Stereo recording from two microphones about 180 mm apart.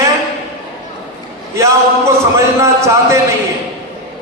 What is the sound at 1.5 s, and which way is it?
A man's voice, 15° right (ahead or behind).